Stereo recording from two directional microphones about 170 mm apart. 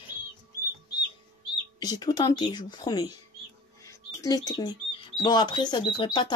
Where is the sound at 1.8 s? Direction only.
20° left (ahead or behind).